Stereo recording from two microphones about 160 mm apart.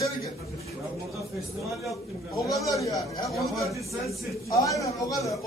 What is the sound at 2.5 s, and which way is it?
A man's voice, 20° left (ahead or behind).